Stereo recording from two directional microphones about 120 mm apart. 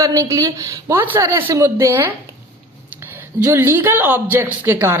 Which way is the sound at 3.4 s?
20° right (ahead or behind).